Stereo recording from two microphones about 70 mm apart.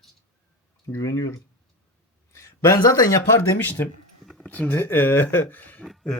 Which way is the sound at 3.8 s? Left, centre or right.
Left.